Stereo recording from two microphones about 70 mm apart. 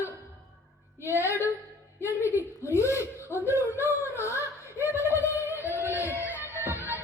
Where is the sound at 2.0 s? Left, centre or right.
Left.